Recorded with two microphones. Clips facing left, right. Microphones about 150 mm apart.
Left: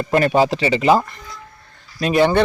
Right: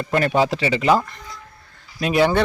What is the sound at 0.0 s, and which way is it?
Speech, 10° left (ahead or behind).